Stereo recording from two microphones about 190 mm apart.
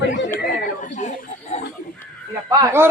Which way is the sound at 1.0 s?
40° left (ahead or behind).